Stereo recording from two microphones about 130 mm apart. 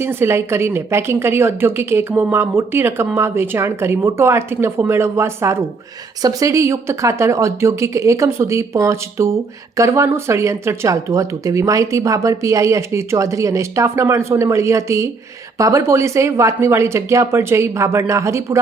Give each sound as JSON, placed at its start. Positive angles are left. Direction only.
{"t": 0.0, "sound": "a woman's voice", "side_deg": -20}